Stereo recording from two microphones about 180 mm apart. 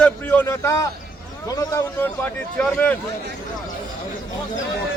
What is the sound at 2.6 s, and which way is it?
Speech, 5° left (ahead or behind).